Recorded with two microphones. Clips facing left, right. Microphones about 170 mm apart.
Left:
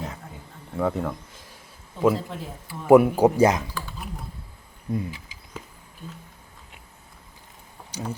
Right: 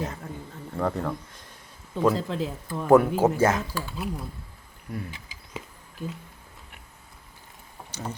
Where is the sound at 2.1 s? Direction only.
90° right.